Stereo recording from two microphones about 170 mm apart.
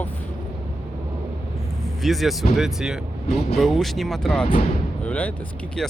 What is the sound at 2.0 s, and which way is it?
Speech, centre (ahead or behind).